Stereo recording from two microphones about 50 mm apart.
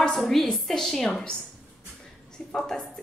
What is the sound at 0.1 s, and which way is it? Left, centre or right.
A woman's voice, centre.